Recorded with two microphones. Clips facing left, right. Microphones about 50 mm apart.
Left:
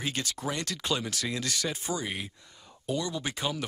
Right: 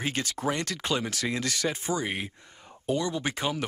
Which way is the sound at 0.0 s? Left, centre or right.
Right.